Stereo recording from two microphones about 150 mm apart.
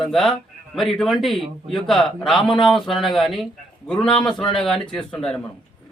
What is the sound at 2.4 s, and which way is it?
Speech, 35° left (ahead or behind).